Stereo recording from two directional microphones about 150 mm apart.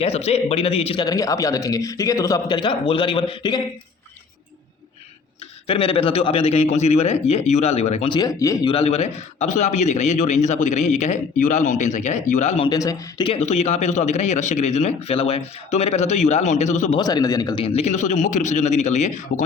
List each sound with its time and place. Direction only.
0.0 s a man's voice: 45° left (ahead or behind)
1.0 s speech: 25° left (ahead or behind)
5.6 s a man's voice: 40° left (ahead or behind)
8.1 s speech: 25° left (ahead or behind)
8.7 s a man's voice: 45° left (ahead or behind)
12.6 s speech: 25° left (ahead or behind)
13.4 s a man's voice: 50° left (ahead or behind)
17.0 s speech: 25° left (ahead or behind)
17.6 s a man's voice: 40° left (ahead or behind)